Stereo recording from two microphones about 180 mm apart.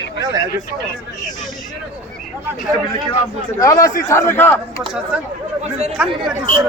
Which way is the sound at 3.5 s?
20° left (ahead or behind).